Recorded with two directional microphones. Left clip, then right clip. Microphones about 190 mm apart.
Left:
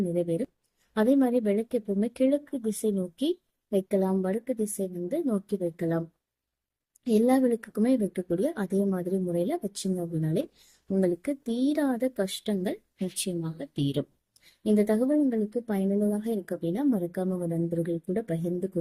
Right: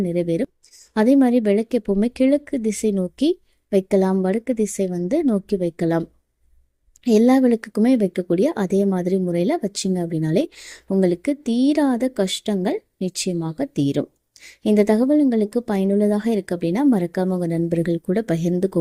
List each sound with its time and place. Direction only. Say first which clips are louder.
0.1 s a woman's voice: right 7 dB; 40° right (ahead or behind)
7.0 s a woman's voice: right 8 dB; 40° right (ahead or behind)